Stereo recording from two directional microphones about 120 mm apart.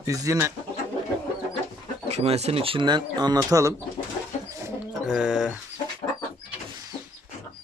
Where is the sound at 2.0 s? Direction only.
60° right (ahead or behind); by 3.8 s 25° right (ahead or behind).